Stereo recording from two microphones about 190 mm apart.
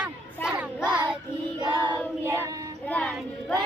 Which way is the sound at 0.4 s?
5° right (ahead or behind).